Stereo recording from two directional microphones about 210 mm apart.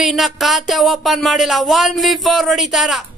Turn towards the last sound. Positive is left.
turn(degrees=0)  # may be behind; listen again after turning